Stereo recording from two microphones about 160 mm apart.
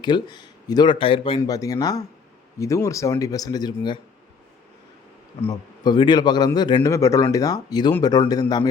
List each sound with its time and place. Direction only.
0.0 s a man's voice: 25° left (ahead or behind)
1.4 s a man's voice: 20° left (ahead or behind)
5.4 s a man's voice: 25° left (ahead or behind)